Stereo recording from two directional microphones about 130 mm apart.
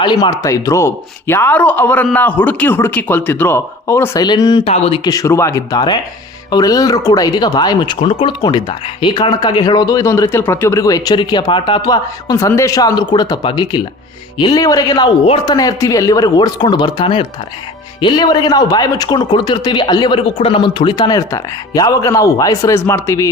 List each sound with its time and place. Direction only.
0.0 s speech: 35° left (ahead or behind)
4.2 s speech: 30° left (ahead or behind)
4.6 s speech: 50° left (ahead or behind)
5.0 s speech: 25° left (ahead or behind)